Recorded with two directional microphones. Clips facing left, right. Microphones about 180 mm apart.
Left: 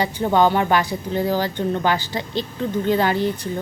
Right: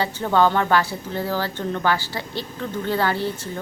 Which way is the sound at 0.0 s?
15° left (ahead or behind).